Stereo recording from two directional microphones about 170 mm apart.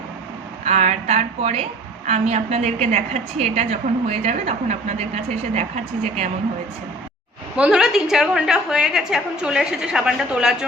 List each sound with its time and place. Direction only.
0.6 s a woman's voice: 40° right (ahead or behind)
7.5 s a woman's voice: 5° right (ahead or behind)